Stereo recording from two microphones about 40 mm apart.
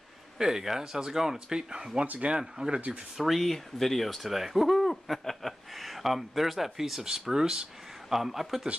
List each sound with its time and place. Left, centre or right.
0.4 s speech: centre
3.2 s speech: centre
3.4 s speech: centre